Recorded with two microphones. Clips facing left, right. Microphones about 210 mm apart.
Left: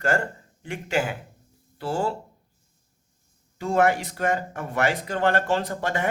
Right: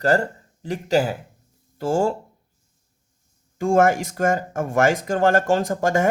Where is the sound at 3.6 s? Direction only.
45° right (ahead or behind).